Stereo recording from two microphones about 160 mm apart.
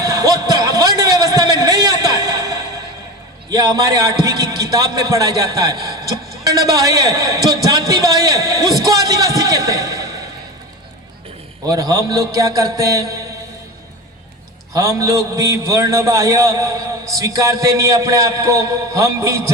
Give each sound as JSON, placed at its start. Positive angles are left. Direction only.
{"t": 0.0, "sound": "a sound", "side_deg": -20}
{"t": 2.2, "sound": "music", "side_deg": -20}
{"t": 3.5, "sound": "a man's voice", "side_deg": -25}
{"t": 8.9, "sound": "a sound", "side_deg": -20}
{"t": 11.7, "sound": "a man's voice", "side_deg": -20}
{"t": 14.7, "sound": "a man's voice", "side_deg": -20}